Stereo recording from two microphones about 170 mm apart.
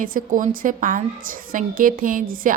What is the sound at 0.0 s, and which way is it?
A woman's voice, 55° right (ahead or behind).